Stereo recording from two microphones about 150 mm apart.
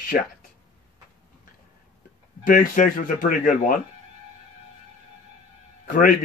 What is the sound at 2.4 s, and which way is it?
Speech, 60° left (ahead or behind).